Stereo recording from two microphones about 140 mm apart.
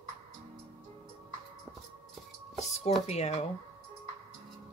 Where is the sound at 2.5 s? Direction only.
50° left (ahead or behind).